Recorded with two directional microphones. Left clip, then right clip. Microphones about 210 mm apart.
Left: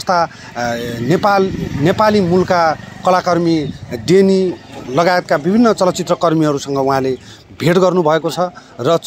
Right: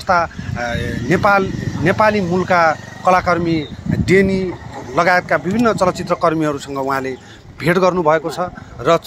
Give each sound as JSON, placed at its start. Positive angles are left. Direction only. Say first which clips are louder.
{"t": 0.0, "sound": "speech", "louder": "left 1 dB", "side_deg": 55}